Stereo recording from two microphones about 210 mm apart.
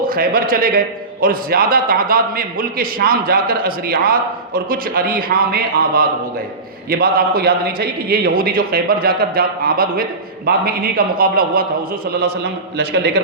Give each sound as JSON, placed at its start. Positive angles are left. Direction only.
{"t": 0.1, "sound": "a man's voice", "side_deg": -45}
{"t": 12.7, "sound": "a man's voice", "side_deg": -50}